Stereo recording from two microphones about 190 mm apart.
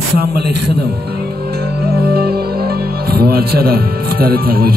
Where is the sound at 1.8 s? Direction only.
55° right (ahead or behind).